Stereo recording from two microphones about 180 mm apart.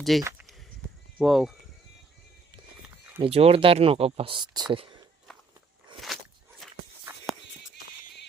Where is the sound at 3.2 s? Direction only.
35° right (ahead or behind).